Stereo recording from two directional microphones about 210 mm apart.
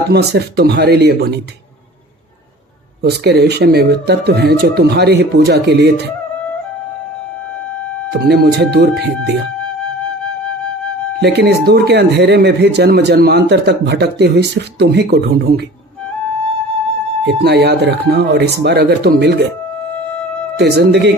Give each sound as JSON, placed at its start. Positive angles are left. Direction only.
{"t": 0.1, "sound": "speech", "side_deg": -50}
{"t": 3.0, "sound": "speech", "side_deg": -50}
{"t": 8.3, "sound": "speech", "side_deg": -50}
{"t": 11.2, "sound": "speech", "side_deg": -50}
{"t": 17.2, "sound": "speech", "side_deg": -50}
{"t": 20.6, "sound": "speech", "side_deg": -50}